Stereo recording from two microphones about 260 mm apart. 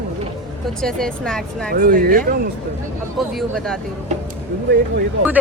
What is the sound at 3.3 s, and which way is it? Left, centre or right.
Speech, centre.